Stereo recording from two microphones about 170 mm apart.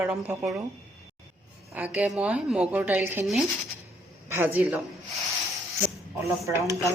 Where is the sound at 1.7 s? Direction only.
10° right (ahead or behind).